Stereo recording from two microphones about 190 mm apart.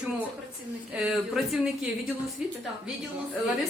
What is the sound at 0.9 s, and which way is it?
Speech, centre (ahead or behind).